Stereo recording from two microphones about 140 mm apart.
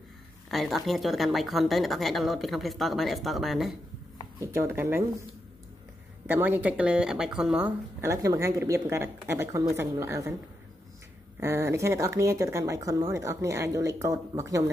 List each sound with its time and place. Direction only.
0.5 s speech: centre (ahead or behind)
4.4 s speech: 20° right (ahead or behind)
6.2 s speech: 15° right (ahead or behind)
8.0 s speech: 20° right (ahead or behind)
11.3 s speech: 20° right (ahead or behind)